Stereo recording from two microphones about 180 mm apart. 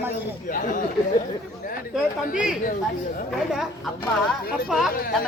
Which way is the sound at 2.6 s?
50° left (ahead or behind).